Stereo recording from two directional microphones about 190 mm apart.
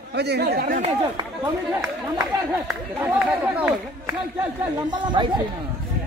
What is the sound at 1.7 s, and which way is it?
Speech, 5° right (ahead or behind).